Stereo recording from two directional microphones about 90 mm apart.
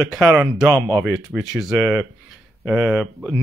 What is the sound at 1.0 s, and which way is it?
Speech, centre (ahead or behind).